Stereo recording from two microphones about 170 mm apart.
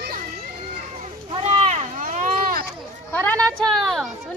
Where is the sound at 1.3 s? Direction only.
30° right (ahead or behind).